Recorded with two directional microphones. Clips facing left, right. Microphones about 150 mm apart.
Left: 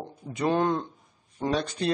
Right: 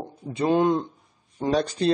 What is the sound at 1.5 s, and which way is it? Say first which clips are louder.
Speech: right 6 dB; 35° right (ahead or behind).